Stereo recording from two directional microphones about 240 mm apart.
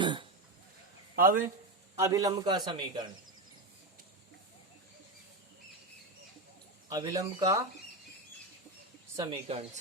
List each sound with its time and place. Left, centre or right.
0.0 s a sound: centre
1.1 s speech: right
2.0 s a man's voice: centre
6.9 s a man's voice: centre
9.1 s speech: centre